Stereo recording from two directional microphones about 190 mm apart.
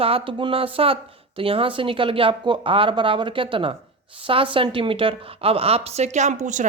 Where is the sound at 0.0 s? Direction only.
30° right (ahead or behind).